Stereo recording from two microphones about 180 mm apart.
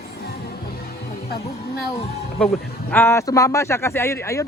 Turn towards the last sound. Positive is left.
turn(degrees=15)  # may be behind; listen again after turning